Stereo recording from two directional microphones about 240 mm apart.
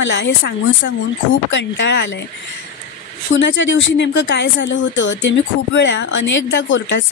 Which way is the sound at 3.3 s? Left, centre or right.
Left.